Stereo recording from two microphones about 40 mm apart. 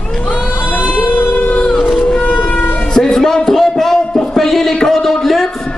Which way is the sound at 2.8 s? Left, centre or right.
Left.